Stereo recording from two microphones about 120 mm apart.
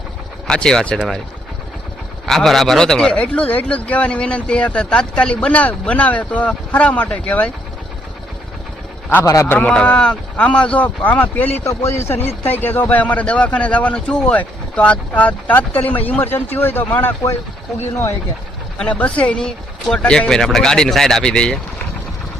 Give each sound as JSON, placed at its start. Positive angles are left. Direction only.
{"t": 0.4, "sound": "speech", "side_deg": 5}
{"t": 2.2, "sound": "speech", "side_deg": 0}
{"t": 9.0, "sound": "a man's voice", "side_deg": 20}
{"t": 9.5, "sound": "a man's voice", "side_deg": 10}
{"t": 18.8, "sound": "speech", "side_deg": 10}